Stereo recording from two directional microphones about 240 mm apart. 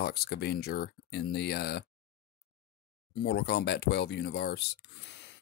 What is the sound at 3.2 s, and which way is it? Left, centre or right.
Speech, left.